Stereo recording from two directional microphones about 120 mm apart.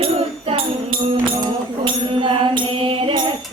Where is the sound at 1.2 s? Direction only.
45° right (ahead or behind).